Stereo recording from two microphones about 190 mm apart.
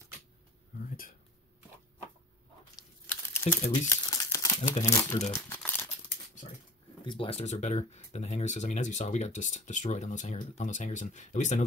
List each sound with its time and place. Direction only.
0.8 s a sound: 45° left (ahead or behind)
3.1 s crumpling: 10° left (ahead or behind)
4.7 s speech: 35° left (ahead or behind)
5.3 s crumpling: 10° left (ahead or behind)
7.1 s speech: 30° left (ahead or behind)